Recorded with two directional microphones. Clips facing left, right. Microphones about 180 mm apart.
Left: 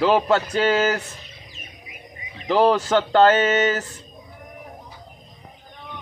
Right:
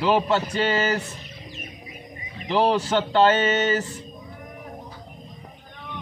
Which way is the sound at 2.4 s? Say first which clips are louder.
Left 3 dB; 45° left (ahead or behind).